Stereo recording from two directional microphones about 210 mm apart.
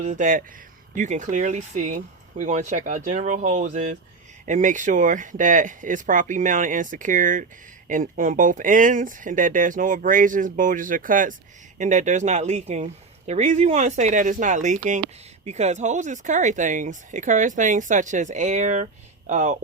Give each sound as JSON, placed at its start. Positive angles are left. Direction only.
{"t": 0.0, "sound": "speech", "side_deg": -40}